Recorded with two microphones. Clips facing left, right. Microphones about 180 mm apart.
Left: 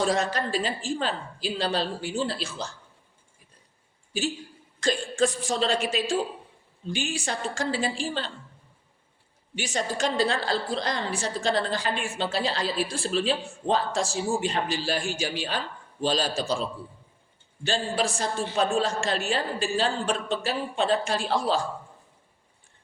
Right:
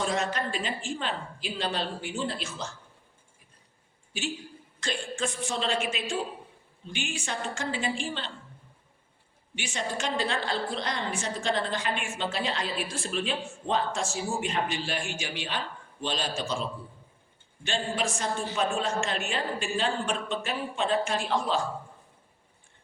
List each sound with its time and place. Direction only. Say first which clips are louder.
0.0 s a woman's voice: left 4 dB; 35° left (ahead or behind)
4.8 s a woman's voice: left 8 dB; 40° left (ahead or behind)
9.6 s a woman's voice: left 5 dB; 40° left (ahead or behind)